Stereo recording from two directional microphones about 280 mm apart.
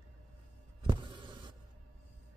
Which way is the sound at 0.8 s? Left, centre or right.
Centre.